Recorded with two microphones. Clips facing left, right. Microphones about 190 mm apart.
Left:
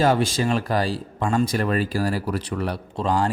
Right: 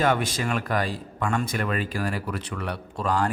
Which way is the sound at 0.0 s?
30° left (ahead or behind).